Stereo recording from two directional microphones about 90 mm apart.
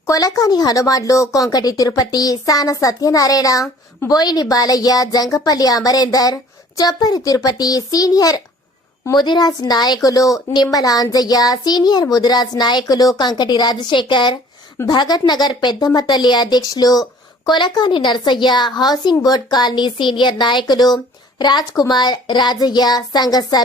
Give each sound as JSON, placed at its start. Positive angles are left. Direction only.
{"t": 0.1, "sound": "speech", "side_deg": 40}
{"t": 9.1, "sound": "speech", "side_deg": 55}
{"t": 14.8, "sound": "a woman's voice", "side_deg": 50}